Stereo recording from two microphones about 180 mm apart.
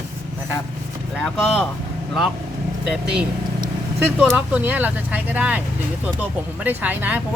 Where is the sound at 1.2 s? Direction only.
5° left (ahead or behind).